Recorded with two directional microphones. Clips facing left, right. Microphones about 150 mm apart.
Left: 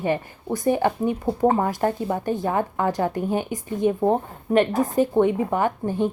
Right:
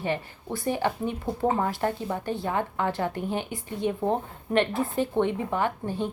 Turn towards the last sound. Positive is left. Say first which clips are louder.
# left 5 dB
turn(degrees=45)  # may be behind; listen again after turning